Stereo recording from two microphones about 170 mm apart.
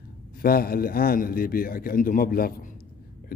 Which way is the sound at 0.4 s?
60° left (ahead or behind).